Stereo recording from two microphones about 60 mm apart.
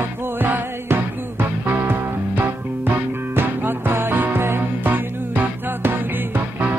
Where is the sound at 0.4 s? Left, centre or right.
Right.